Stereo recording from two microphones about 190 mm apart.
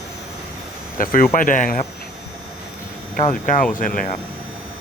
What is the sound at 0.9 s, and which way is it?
Speech, 50° left (ahead or behind).